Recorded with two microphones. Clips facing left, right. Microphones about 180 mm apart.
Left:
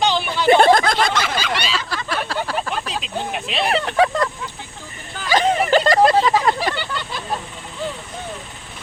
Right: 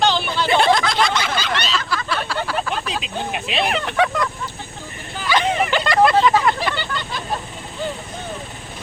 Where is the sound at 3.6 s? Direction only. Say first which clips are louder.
Left 4 dB; 35° left (ahead or behind).